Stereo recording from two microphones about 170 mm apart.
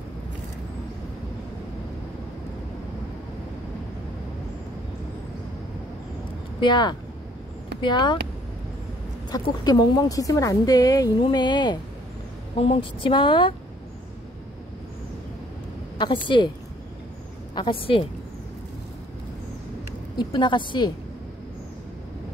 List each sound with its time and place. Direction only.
6.6 s speech: 25° left (ahead or behind)
9.3 s speech: 25° left (ahead or behind)
16.3 s speech: 25° left (ahead or behind)
17.6 s speech: 30° left (ahead or behind)
20.2 s speech: 25° left (ahead or behind)